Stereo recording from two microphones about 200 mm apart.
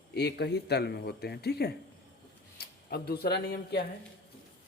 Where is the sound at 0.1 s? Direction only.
55° left (ahead or behind).